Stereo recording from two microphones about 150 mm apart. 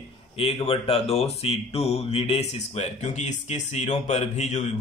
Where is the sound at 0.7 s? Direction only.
40° left (ahead or behind).